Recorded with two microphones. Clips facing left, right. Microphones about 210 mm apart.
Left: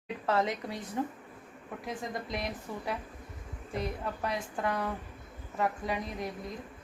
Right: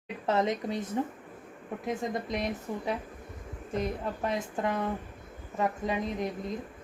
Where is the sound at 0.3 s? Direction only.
20° right (ahead or behind).